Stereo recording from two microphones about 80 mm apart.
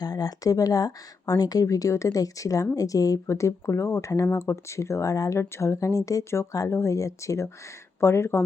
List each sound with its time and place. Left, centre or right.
0.0 s speech: left